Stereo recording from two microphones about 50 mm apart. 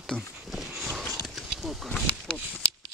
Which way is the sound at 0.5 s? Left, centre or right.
Centre.